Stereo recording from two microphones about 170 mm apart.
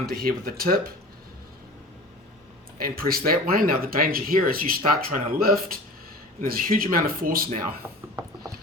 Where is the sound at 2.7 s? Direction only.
60° right (ahead or behind).